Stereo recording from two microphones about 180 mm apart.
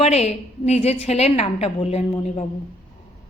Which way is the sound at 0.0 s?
35° left (ahead or behind).